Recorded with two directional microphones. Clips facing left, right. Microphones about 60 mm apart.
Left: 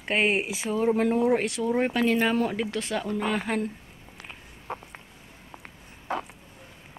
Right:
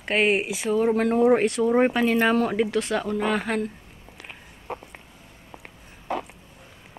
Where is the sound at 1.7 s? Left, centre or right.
Right.